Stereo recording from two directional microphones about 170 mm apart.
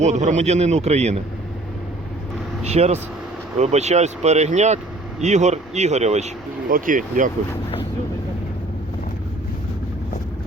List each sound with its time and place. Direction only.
0.0 s speech: 45° right (ahead or behind)
2.6 s speech: 40° right (ahead or behind)
6.7 s speech: 55° right (ahead or behind)